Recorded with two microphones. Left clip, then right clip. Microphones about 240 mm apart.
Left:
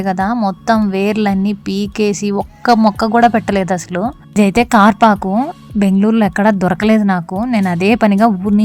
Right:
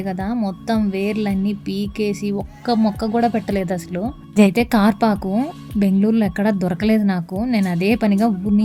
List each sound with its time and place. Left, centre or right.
0.0 s speech: left